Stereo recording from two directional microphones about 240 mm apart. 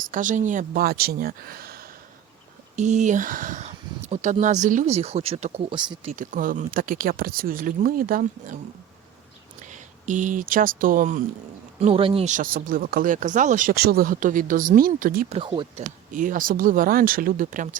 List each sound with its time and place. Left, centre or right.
0.1 s speech: right
6.1 s speech: right
9.6 s speech: right
15.4 s speech: right